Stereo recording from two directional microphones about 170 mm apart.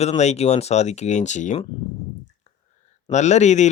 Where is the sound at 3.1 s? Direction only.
45° left (ahead or behind).